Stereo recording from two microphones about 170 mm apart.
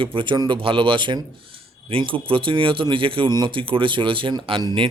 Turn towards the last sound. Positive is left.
turn(degrees=-25)  # may be behind; listen again after turning